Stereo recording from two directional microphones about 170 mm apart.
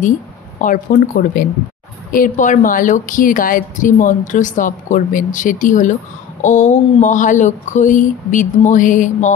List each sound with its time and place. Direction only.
0.6 s a woman's voice: 50° left (ahead or behind)